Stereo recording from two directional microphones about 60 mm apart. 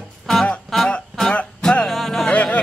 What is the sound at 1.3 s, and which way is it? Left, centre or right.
Music, centre.